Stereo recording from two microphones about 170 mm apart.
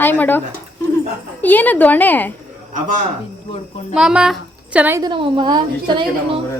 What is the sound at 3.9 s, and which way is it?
A woman's voice, 5° right (ahead or behind).